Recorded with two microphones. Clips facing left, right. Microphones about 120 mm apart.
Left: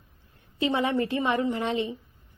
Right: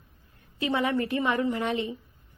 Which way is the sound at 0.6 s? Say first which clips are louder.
Left 1 dB; 25° left (ahead or behind).